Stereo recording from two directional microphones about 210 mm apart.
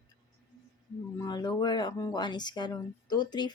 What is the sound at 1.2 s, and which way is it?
Speech, 20° left (ahead or behind).